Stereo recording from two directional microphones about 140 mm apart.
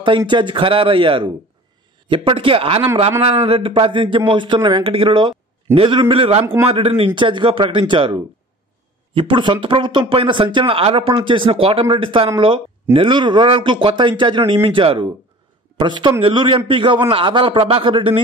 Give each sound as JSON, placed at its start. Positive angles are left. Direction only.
{"t": 0.3, "sound": "speech", "side_deg": -35}
{"t": 6.4, "sound": "speech", "side_deg": -20}
{"t": 6.7, "sound": "speech", "side_deg": -40}